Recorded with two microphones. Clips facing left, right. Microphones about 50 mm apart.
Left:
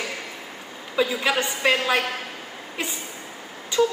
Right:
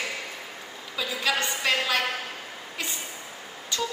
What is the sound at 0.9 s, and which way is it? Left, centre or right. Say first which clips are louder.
A woman's voice: left 5 dB; left.